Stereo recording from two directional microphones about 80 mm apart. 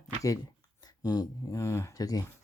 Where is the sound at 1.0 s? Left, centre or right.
Left.